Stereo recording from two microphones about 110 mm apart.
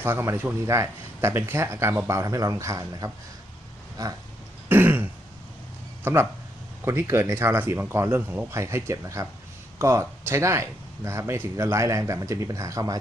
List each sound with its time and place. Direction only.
0.0 s speech: 20° right (ahead or behind)
4.7 s throat clearing: 20° right (ahead or behind)
6.0 s speech: 20° right (ahead or behind)